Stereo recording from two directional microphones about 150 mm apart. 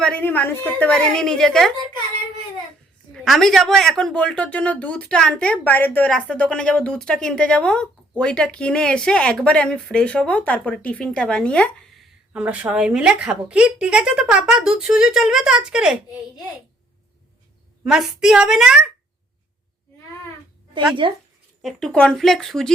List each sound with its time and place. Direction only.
0.0 s speech: 10° left (ahead or behind)
3.2 s speech: centre (ahead or behind)
12.3 s a woman's voice: 10° right (ahead or behind)
17.8 s a woman's voice: 5° right (ahead or behind)
21.0 s speech: 35° right (ahead or behind)
21.6 s a woman's voice: centre (ahead or behind)